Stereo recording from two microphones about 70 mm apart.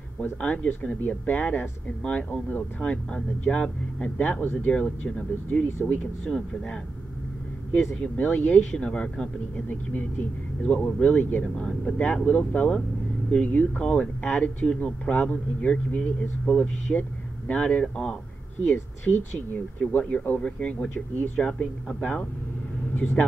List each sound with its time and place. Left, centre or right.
0.2 s speech: centre
8.0 s speech: left
9.7 s speech: left
18.6 s speech: left
19.8 s speech: centre